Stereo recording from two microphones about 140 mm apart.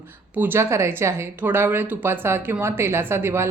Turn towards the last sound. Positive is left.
turn(degrees=-15)  # may be behind; listen again after turning